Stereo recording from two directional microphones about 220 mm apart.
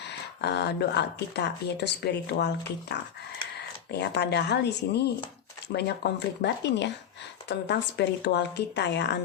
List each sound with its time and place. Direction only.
0.1 s speech: 50° left (ahead or behind)